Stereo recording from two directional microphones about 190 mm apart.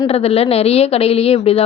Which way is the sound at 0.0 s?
30° left (ahead or behind).